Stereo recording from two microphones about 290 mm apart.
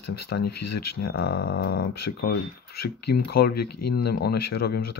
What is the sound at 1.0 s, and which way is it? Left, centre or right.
Speech, left.